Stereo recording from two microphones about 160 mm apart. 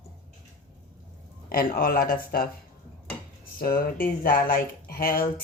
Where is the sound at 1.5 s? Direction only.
65° left (ahead or behind).